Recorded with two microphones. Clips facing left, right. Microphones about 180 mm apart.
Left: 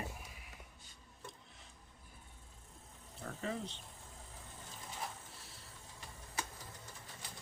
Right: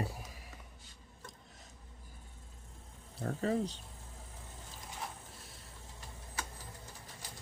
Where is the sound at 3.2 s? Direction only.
40° right (ahead or behind).